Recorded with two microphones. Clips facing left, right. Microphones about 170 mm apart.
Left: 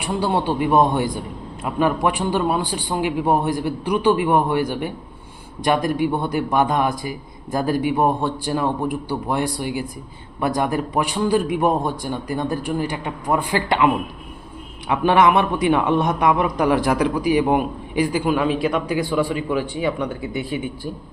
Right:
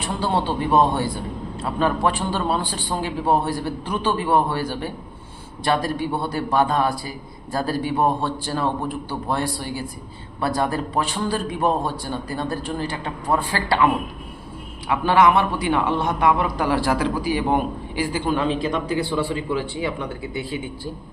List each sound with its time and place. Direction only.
0.0 s a man's voice: 15° left (ahead or behind)